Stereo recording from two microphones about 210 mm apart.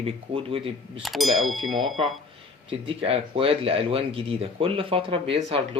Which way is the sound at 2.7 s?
25° right (ahead or behind).